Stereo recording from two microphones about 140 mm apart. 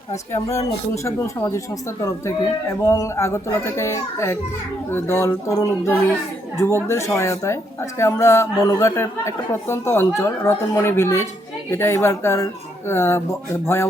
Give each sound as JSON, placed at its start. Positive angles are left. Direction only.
{"t": 0.9, "sound": "speech", "side_deg": 20}